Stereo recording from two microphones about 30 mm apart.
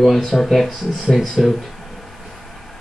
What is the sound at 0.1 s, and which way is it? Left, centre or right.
Speech, centre.